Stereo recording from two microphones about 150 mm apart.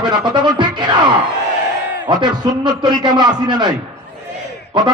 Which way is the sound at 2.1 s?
30° right (ahead or behind).